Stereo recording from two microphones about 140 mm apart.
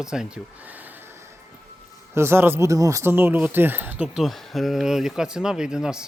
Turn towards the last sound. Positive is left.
turn(degrees=-5)  # may be behind; listen again after turning